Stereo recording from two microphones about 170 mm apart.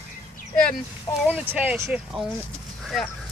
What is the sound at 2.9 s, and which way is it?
Speech, centre (ahead or behind).